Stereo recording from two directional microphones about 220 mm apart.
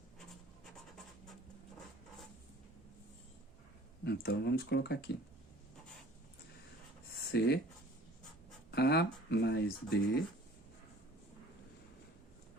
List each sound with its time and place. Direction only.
4.0 s speech: 45° left (ahead or behind)
7.3 s speech: 50° left (ahead or behind)
8.7 s a sound: 50° left (ahead or behind)
9.3 s speech: 50° left (ahead or behind)